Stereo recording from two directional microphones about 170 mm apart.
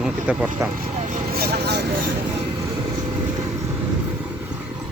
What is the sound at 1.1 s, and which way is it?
Vehicle, 45° right (ahead or behind).